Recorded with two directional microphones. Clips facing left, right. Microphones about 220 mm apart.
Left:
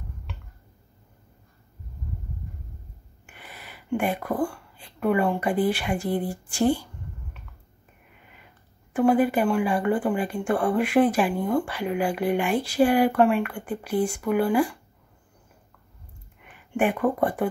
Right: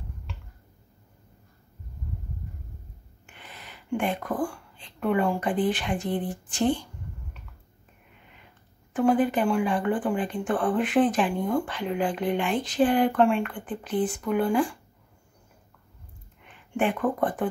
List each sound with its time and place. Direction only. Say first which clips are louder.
3.3 s speech: left 1 dB; 10° left (ahead or behind)
8.9 s speech: left 2 dB; 10° left (ahead or behind)
16.4 s a sound: left 2 dB; 10° left (ahead or behind)
17.2 s speech: left 2 dB; 10° left (ahead or behind)